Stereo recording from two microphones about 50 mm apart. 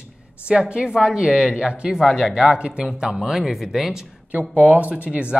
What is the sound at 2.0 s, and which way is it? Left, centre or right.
Speech, centre.